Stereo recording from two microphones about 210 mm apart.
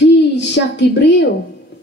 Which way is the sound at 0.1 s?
55° left (ahead or behind).